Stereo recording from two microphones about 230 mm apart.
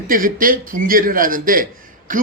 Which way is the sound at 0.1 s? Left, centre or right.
Right.